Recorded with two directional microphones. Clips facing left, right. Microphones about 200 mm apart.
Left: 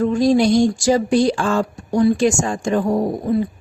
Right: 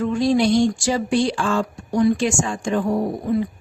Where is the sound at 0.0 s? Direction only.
40° left (ahead or behind).